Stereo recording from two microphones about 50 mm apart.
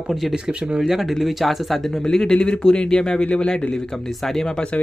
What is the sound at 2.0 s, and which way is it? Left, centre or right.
Speech, centre.